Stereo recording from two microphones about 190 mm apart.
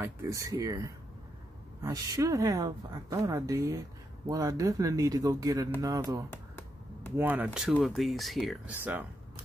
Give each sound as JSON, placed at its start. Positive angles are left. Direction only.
{"t": 0.0, "sound": "a woman's voice", "side_deg": -15}
{"t": 6.3, "sound": "finger snapping", "side_deg": 10}
{"t": 7.2, "sound": "a woman's voice", "side_deg": -10}